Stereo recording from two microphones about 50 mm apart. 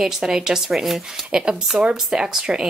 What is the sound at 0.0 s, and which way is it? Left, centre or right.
Speech, centre.